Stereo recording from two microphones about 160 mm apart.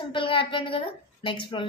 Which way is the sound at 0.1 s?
35° left (ahead or behind).